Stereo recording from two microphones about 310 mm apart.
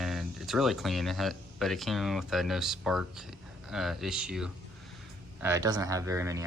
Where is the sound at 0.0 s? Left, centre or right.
Centre.